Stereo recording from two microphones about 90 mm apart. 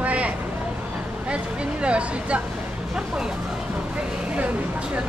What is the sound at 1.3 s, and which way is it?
Speech, 10° right (ahead or behind).